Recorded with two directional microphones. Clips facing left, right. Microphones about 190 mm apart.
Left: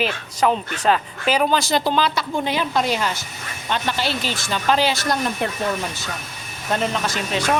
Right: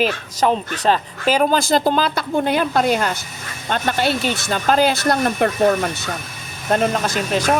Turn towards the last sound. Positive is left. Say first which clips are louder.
# right 3 dB
turn(degrees=-50)  # may be behind; listen again after turning